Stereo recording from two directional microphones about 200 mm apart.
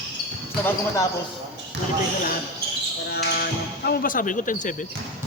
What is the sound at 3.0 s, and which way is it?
Speech, 55° left (ahead or behind).